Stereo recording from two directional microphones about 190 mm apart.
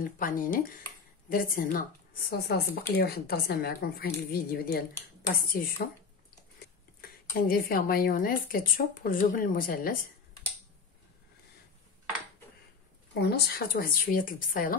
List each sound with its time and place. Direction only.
0.0 s a woman's voice: 45° left (ahead or behind)
13.2 s a woman's voice: 55° left (ahead or behind)